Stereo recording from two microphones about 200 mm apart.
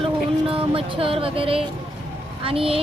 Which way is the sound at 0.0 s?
25° right (ahead or behind).